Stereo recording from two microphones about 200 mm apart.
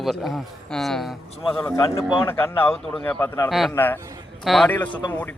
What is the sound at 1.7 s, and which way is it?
A man's voice, 15° left (ahead or behind).